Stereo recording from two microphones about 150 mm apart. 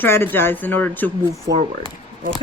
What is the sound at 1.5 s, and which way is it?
Speech, 90° right.